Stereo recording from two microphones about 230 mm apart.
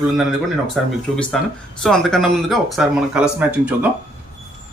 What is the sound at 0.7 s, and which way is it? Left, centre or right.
Speech, centre.